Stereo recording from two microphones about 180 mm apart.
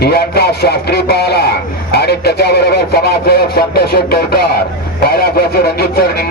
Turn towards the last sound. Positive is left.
turn(degrees=60)  # may be behind; listen again after turning